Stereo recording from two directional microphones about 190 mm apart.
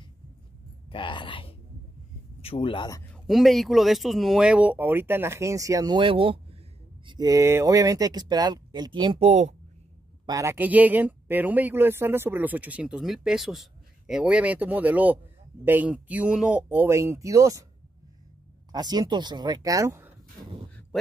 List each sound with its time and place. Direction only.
0.8 s speech: 25° left (ahead or behind)
3.1 s speech: centre (ahead or behind); by 9.6 s 35° right (ahead or behind)
10.2 s speech: 15° right (ahead or behind)
18.7 s speech: 20° right (ahead or behind)